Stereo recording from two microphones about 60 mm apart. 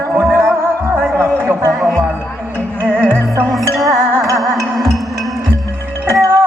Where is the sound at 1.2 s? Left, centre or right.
Right.